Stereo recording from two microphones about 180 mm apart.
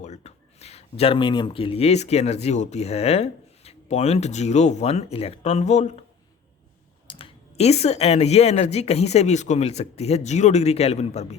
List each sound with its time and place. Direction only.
0.0 s speech: 40° left (ahead or behind)
7.1 s speech: 30° left (ahead or behind)